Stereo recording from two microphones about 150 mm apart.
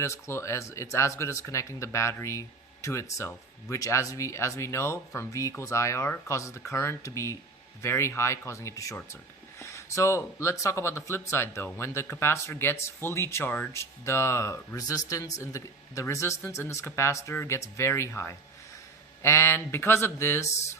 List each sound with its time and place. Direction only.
0.0 s speech: 20° left (ahead or behind)